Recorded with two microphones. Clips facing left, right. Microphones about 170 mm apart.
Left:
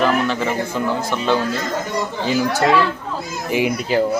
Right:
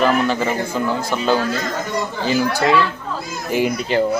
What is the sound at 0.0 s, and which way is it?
Speech, 5° right (ahead or behind).